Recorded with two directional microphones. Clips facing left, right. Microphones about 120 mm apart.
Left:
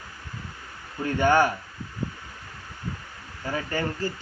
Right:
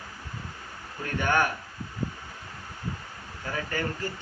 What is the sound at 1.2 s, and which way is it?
Speech, 30° left (ahead or behind).